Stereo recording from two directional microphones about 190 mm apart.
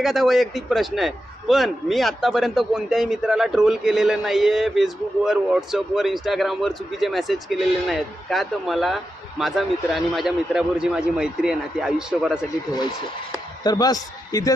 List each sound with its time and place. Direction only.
0.0 s a man's voice: centre (ahead or behind)
13.7 s a man's voice: 20° left (ahead or behind)